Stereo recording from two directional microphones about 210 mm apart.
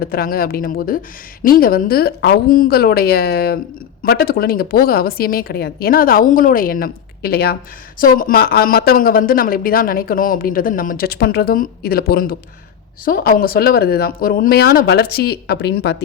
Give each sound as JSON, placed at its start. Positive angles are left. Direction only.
{"t": 0.0, "sound": "speech", "side_deg": 45}